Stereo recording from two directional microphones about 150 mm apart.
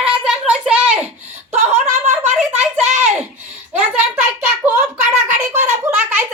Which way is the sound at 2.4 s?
10° right (ahead or behind).